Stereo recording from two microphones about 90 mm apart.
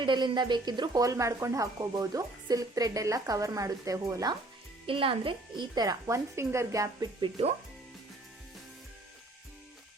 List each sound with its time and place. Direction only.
0.0 s speech: 60° right (ahead or behind); by 4.3 s 35° right (ahead or behind)
4.9 s a woman's voice: 80° right; by 6.0 s 50° right (ahead or behind)
6.1 s speech: 30° right (ahead or behind)